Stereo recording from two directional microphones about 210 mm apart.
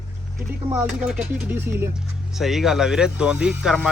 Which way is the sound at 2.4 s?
Centre (ahead or behind).